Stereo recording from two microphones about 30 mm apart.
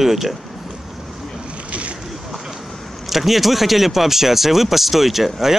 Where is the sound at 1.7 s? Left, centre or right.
Right.